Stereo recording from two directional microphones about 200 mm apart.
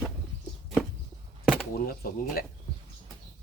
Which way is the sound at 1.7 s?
45° left (ahead or behind).